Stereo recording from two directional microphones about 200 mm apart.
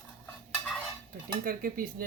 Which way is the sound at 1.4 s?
45° right (ahead or behind).